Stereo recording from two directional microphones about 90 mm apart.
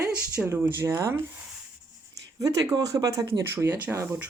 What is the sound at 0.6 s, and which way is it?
Speech, 25° right (ahead or behind).